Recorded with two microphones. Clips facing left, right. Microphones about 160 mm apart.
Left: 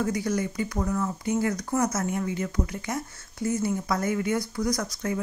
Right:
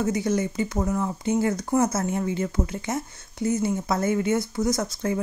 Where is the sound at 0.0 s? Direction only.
25° right (ahead or behind).